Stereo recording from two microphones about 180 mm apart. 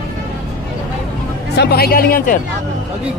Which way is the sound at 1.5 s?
60° left (ahead or behind).